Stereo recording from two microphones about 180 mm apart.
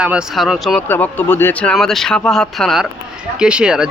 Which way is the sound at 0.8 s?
10° left (ahead or behind).